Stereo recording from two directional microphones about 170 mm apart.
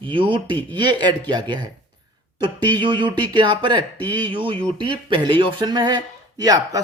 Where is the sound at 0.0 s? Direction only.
30° right (ahead or behind).